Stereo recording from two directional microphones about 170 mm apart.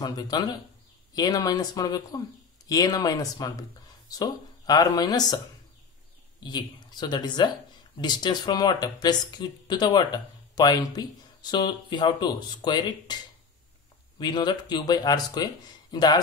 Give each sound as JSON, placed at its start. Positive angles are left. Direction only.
{"t": 0.0, "sound": "speech", "side_deg": 25}
{"t": 6.4, "sound": "speech", "side_deg": 25}
{"t": 14.2, "sound": "speech", "side_deg": 25}